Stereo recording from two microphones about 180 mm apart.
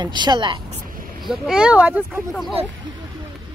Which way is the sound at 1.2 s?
Centre (ahead or behind).